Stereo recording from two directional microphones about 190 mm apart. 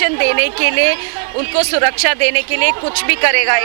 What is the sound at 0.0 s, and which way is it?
A woman's voice, 15° right (ahead or behind).